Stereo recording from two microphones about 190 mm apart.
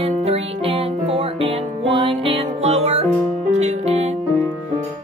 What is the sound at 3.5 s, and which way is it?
Music, 35° right (ahead or behind).